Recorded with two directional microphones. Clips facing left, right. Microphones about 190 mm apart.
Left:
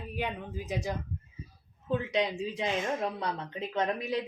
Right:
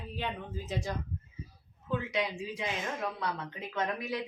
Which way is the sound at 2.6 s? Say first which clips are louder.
Left 5 dB; 20° left (ahead or behind).